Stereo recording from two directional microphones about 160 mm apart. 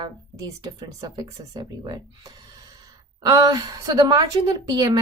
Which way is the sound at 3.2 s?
25° right (ahead or behind).